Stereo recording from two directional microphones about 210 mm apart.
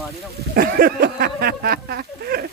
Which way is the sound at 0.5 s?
45° right (ahead or behind).